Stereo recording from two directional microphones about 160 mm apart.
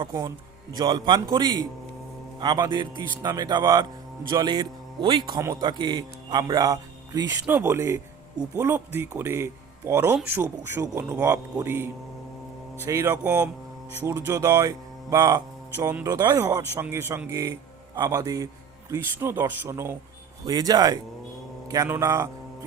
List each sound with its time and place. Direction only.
0.0 s speech: 20° right (ahead or behind)